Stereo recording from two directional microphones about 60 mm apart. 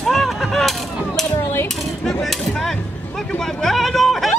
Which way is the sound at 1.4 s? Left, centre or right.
Left.